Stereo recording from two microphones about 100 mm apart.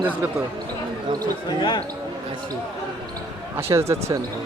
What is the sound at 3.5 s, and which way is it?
Speech, 25° right (ahead or behind).